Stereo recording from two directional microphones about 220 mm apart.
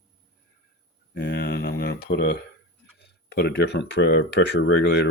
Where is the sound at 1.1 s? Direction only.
50° left (ahead or behind).